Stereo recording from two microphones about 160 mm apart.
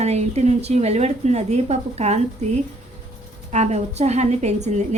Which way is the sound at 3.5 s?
45° right (ahead or behind).